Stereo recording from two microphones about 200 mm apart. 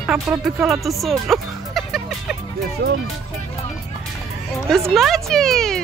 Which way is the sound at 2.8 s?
55° right (ahead or behind).